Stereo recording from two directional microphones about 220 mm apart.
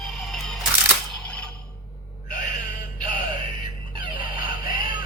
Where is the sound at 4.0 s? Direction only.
20° right (ahead or behind).